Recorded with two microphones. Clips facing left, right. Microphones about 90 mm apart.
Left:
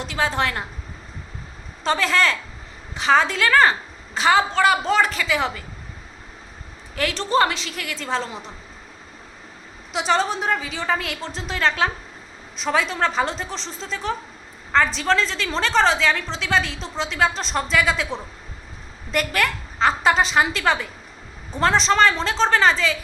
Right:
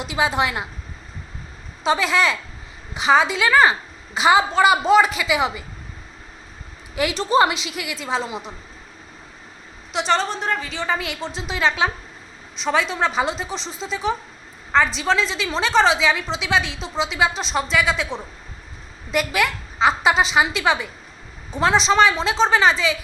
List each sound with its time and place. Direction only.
0.0 s a woman's voice: 10° right (ahead or behind)
1.8 s a woman's voice: 5° right (ahead or behind)
6.9 s a woman's voice: 10° right (ahead or behind)
9.9 s a woman's voice: 5° left (ahead or behind)